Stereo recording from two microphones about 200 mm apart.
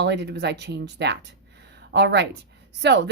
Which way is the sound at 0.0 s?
55° right (ahead or behind).